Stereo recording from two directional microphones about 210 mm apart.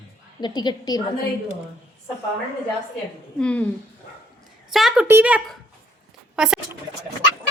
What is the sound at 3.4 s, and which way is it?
Speech, 5° left (ahead or behind).